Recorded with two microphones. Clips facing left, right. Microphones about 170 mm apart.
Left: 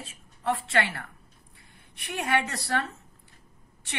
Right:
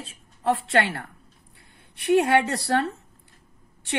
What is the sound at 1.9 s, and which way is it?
Speech, 30° right (ahead or behind).